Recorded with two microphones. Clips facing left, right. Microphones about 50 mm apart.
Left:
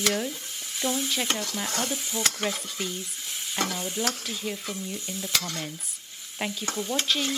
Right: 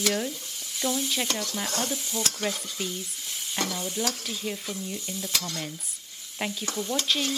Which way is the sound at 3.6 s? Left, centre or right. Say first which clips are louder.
Left 1 dB; left.